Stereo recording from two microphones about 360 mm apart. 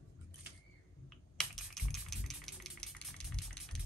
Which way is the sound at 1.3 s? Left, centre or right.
Centre.